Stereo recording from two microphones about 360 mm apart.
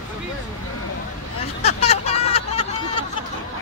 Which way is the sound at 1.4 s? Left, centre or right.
Centre.